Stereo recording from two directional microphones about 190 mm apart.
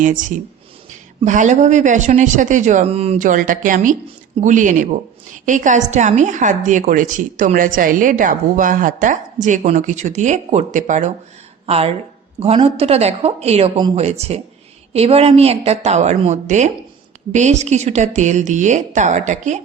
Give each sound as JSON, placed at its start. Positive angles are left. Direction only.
{"t": 0.0, "sound": "a woman's voice", "side_deg": -40}